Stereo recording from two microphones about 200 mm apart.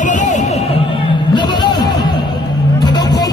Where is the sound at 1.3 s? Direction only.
20° left (ahead or behind).